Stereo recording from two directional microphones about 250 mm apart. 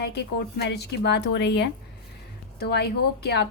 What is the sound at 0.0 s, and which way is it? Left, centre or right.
A woman's voice, left.